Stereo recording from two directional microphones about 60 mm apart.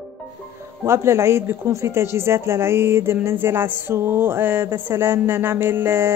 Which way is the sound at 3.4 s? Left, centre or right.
Right.